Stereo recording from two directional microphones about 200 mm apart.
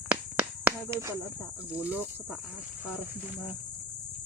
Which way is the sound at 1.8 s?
5° right (ahead or behind).